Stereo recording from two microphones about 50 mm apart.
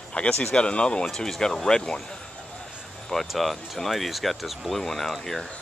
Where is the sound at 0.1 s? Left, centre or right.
Left.